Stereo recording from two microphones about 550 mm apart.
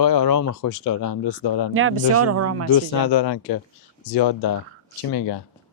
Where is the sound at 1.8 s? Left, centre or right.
Right.